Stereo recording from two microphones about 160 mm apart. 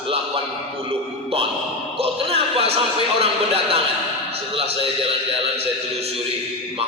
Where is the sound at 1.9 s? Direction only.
35° right (ahead or behind).